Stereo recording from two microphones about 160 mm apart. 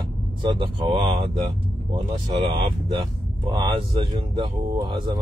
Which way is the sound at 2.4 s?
35° right (ahead or behind).